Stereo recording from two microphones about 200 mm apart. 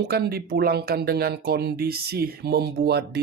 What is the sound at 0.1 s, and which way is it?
Speech, 50° right (ahead or behind).